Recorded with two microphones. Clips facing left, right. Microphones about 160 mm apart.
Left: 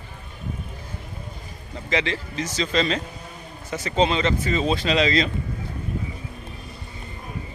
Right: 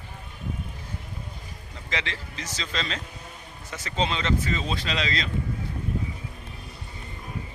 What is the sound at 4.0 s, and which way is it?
Speech, 10° left (ahead or behind).